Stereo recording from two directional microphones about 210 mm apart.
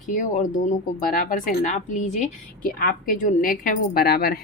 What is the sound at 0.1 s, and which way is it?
A woman's voice, 40° left (ahead or behind).